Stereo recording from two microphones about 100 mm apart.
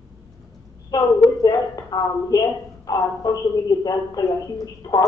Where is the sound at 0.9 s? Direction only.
40° left (ahead or behind).